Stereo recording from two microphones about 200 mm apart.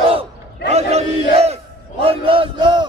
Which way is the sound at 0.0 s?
30° right (ahead or behind).